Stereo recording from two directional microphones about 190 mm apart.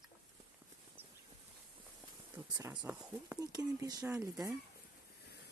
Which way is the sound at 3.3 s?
20° right (ahead or behind).